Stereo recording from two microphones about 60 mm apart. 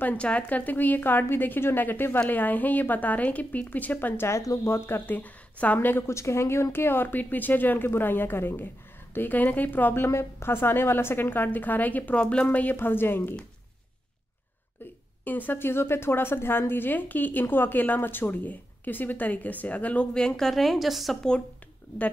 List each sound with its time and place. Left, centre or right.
0.0 s a woman's voice: left
4.6 s a woman's voice: left
6.0 s a woman's voice: left
10.0 s a woman's voice: left; by 12.4 s centre
12.4 s a woman's voice: left
15.2 s a woman's voice: left; by 21.2 s centre